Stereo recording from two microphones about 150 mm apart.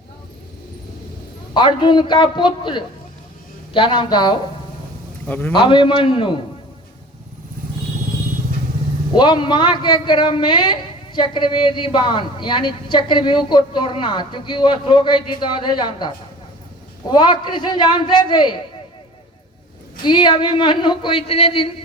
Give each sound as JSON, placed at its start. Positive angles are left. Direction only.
{"t": 1.5, "sound": "a man's voice", "side_deg": 30}
{"t": 5.5, "sound": "a man's voice", "side_deg": 35}
{"t": 9.1, "sound": "a man's voice", "side_deg": 30}
{"t": 20.0, "sound": "a man's voice", "side_deg": 30}